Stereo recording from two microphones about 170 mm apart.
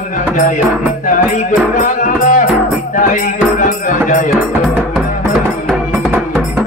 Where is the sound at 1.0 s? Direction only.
50° left (ahead or behind).